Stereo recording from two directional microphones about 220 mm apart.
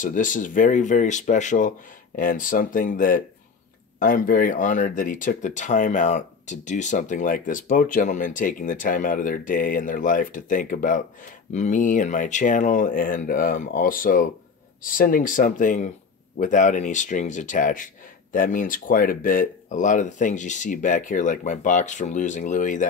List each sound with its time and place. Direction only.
0.0 s speech: 35° left (ahead or behind)